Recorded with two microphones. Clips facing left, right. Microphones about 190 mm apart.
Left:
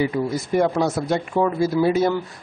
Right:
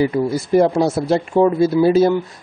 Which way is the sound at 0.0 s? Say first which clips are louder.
Right 4 dB; 35° right (ahead or behind).